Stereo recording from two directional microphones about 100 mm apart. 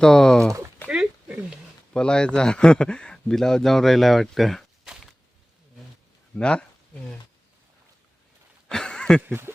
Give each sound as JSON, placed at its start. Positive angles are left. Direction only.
{"t": 0.0, "sound": "speech", "side_deg": 5}
{"t": 0.9, "sound": "a sound", "side_deg": -10}
{"t": 1.9, "sound": "speech", "side_deg": 10}
{"t": 6.3, "sound": "speech", "side_deg": 10}
{"t": 8.6, "sound": "a sound", "side_deg": 5}
{"t": 9.2, "sound": "speech", "side_deg": -20}